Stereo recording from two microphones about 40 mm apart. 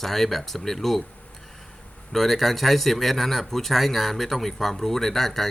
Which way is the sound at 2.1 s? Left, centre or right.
Centre.